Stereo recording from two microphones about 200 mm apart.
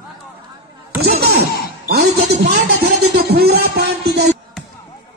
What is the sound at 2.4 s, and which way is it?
Music, 55° right (ahead or behind).